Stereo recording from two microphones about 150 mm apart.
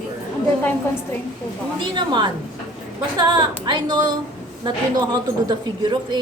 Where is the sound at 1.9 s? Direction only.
30° right (ahead or behind).